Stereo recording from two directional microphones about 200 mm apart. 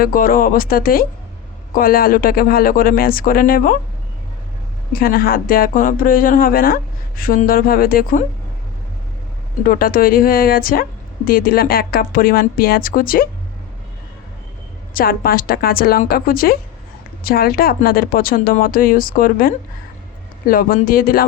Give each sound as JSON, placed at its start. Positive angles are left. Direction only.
{"t": 0.0, "sound": "a woman's voice", "side_deg": 45}
{"t": 4.9, "sound": "a woman's voice", "side_deg": 45}
{"t": 9.6, "sound": "a woman's voice", "side_deg": 45}
{"t": 14.9, "sound": "a woman's voice", "side_deg": 45}